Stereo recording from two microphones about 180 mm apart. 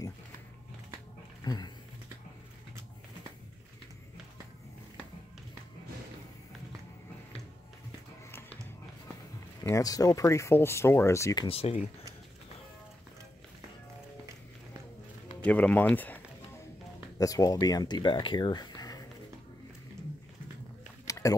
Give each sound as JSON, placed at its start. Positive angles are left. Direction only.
{"t": 1.4, "sound": "speech", "side_deg": 20}
{"t": 9.6, "sound": "speech", "side_deg": 20}
{"t": 11.4, "sound": "speech", "side_deg": 35}
{"t": 15.4, "sound": "speech", "side_deg": 10}
{"t": 17.2, "sound": "speech", "side_deg": 20}
{"t": 21.1, "sound": "a sound", "side_deg": 20}